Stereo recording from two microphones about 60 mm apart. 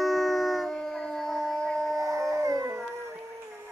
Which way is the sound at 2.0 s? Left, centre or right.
Right.